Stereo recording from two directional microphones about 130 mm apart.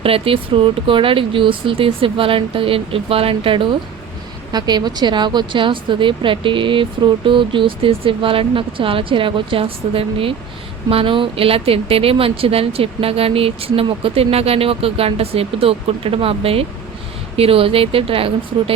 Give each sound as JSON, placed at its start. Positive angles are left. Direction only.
{"t": 0.0, "sound": "speech", "side_deg": -45}